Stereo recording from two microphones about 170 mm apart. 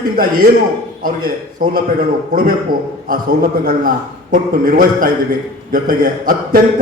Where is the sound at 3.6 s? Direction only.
55° right (ahead or behind).